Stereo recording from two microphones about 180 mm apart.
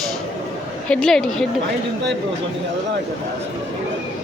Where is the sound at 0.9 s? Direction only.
5° left (ahead or behind).